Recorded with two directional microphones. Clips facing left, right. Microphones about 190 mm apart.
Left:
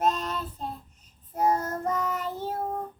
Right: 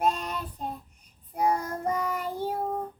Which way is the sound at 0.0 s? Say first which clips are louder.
Left 1 dB; 10° right (ahead or behind).